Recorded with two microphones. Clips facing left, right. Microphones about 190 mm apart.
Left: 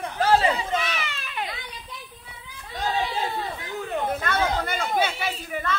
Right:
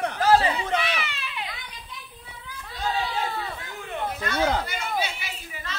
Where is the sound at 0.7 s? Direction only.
45° left (ahead or behind).